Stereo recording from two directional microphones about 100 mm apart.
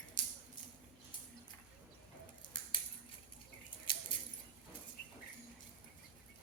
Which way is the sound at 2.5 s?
45° left (ahead or behind).